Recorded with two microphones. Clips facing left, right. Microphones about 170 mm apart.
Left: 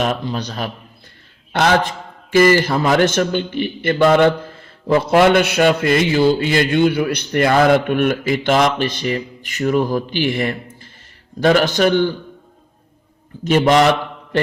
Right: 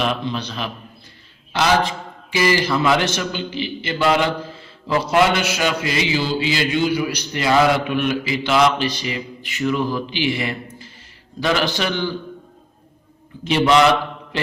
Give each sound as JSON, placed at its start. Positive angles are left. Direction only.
{"t": 0.0, "sound": "a man's voice", "side_deg": 40}
{"t": 2.3, "sound": "a man's voice", "side_deg": 50}
{"t": 13.4, "sound": "a man's voice", "side_deg": 45}